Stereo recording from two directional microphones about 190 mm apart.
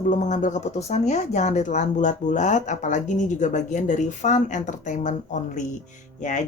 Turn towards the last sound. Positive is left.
turn(degrees=40)  # may be behind; listen again after turning